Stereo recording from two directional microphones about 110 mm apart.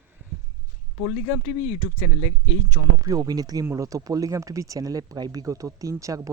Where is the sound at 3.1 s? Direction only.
35° right (ahead or behind).